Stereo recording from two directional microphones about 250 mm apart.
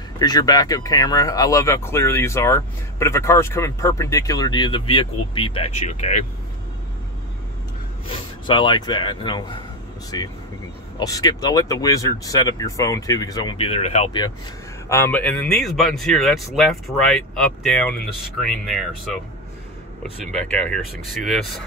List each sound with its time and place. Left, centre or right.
0.2 s speech: centre
8.1 s speech: centre
14.9 s speech: centre